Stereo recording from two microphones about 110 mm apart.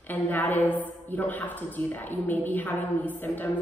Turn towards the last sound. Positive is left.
turn(degrees=15)  # may be behind; listen again after turning